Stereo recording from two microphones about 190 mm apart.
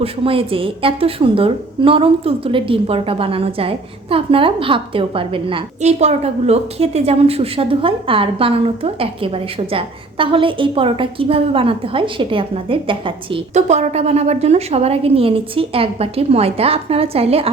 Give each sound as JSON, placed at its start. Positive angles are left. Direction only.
{"t": 0.0, "sound": "a woman's voice", "side_deg": -30}